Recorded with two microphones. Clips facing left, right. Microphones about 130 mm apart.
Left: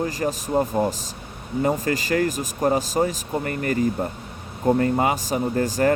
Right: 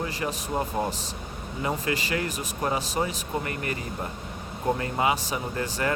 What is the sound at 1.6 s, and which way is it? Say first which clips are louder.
Speech: left 5 dB; 40° left (ahead or behind).